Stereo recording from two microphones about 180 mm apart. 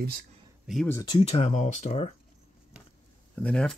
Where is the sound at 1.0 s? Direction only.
30° left (ahead or behind).